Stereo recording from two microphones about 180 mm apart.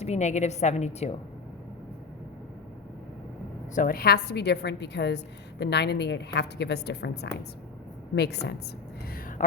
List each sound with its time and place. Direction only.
0.0 s a woman's voice: 40° left (ahead or behind)
3.8 s a woman's voice: 55° left (ahead or behind)
9.4 s a woman's voice: 45° left (ahead or behind)